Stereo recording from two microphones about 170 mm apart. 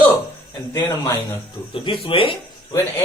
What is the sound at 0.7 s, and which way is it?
A man's voice, 20° left (ahead or behind).